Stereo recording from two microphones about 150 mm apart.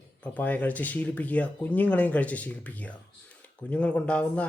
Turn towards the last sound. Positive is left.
turn(degrees=10)  # may be behind; listen again after turning